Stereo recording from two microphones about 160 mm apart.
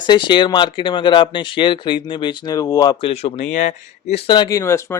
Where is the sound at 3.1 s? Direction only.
40° left (ahead or behind).